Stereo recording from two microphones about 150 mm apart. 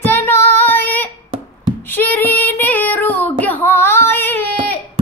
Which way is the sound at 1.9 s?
15° left (ahead or behind).